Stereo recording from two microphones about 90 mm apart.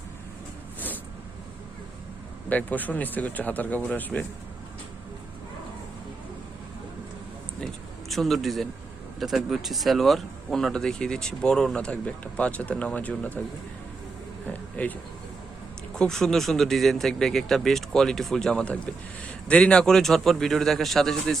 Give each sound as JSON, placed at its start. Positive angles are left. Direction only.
{"t": 2.5, "sound": "speech", "side_deg": 20}
{"t": 8.1, "sound": "speech", "side_deg": 0}
{"t": 14.4, "sound": "a sound", "side_deg": 20}
{"t": 16.0, "sound": "speech", "side_deg": 5}